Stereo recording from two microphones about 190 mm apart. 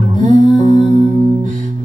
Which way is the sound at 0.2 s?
40° right (ahead or behind).